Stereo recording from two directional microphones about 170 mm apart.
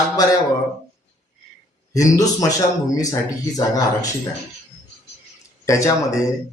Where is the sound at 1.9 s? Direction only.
20° left (ahead or behind).